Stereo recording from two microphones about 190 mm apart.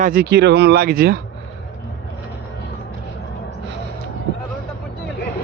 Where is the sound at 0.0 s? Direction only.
50° right (ahead or behind).